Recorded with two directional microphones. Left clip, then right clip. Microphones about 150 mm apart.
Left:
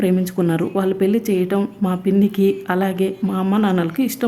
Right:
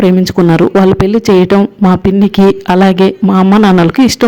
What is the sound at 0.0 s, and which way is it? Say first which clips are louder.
Speech: right 10 dB; 45° right (ahead or behind).